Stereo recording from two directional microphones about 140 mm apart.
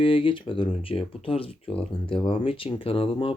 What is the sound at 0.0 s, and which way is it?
Speech, 40° left (ahead or behind).